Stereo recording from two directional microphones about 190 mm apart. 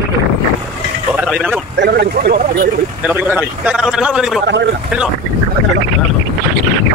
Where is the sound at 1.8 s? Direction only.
60° right (ahead or behind).